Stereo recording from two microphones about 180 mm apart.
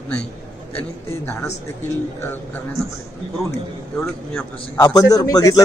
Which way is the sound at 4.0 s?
15° left (ahead or behind).